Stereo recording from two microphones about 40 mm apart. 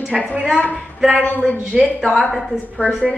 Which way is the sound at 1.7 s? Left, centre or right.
Centre.